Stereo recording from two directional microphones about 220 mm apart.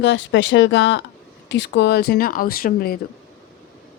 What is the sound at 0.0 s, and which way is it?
Speech, 55° left (ahead or behind).